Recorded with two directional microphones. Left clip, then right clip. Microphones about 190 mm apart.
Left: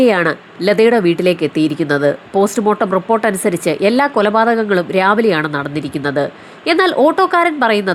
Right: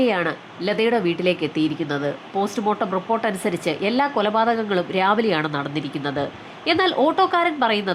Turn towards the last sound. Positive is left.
turn(degrees=20)  # may be behind; listen again after turning